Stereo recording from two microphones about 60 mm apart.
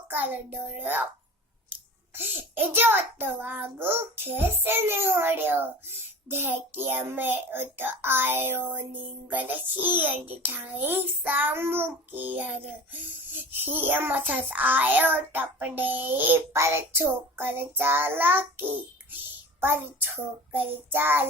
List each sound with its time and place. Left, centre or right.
0.1 s a child's voice: right
2.1 s a child's voice: right
16.5 s a child's voice: right
20.5 s a child's voice: right